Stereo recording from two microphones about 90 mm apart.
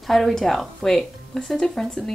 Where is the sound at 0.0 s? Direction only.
5° left (ahead or behind).